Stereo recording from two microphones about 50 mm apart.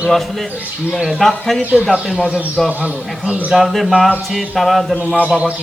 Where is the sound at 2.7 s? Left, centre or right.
Right.